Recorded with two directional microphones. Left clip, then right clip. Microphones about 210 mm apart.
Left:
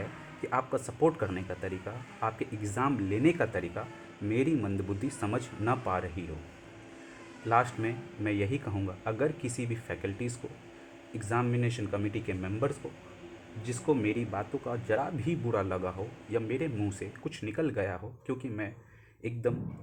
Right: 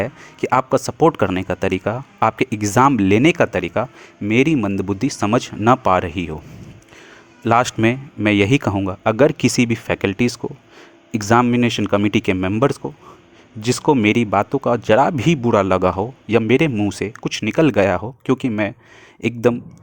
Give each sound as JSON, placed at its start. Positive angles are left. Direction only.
{"t": 0.4, "sound": "speech", "side_deg": -50}
{"t": 7.4, "sound": "speech", "side_deg": -50}